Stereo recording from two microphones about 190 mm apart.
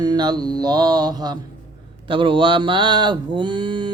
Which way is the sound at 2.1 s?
25° right (ahead or behind).